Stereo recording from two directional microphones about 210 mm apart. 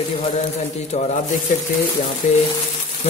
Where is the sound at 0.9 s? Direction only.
30° left (ahead or behind).